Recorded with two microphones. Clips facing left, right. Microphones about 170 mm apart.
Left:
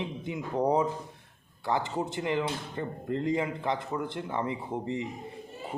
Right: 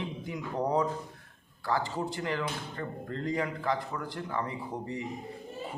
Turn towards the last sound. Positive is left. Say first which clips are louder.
# left 4 dB
turn(degrees=20)  # may be behind; listen again after turning